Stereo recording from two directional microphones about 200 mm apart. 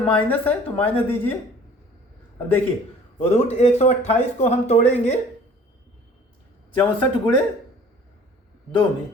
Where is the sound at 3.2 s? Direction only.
30° left (ahead or behind).